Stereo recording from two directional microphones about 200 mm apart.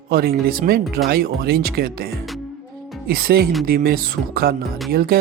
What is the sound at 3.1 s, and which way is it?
Speech, 50° right (ahead or behind).